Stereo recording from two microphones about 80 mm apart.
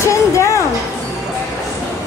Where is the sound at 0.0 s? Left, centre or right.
Left.